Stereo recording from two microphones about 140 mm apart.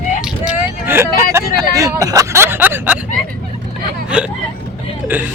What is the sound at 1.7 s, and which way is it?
Speech, 25° right (ahead or behind).